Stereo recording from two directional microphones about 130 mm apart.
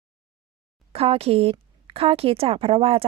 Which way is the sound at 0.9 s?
50° right (ahead or behind).